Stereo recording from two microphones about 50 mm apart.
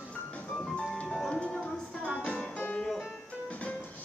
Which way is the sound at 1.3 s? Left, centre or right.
Centre.